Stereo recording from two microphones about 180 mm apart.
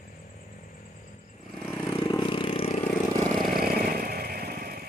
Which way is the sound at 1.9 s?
20° left (ahead or behind).